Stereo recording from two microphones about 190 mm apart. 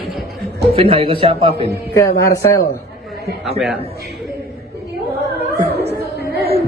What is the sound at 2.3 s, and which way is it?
Speech, 15° left (ahead or behind).